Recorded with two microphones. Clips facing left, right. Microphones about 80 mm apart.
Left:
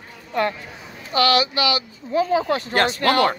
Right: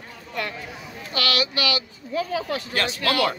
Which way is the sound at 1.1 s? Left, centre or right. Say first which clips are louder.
Left 7 dB; left.